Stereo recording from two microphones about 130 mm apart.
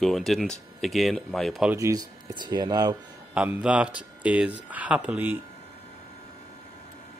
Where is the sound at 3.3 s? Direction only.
10° right (ahead or behind).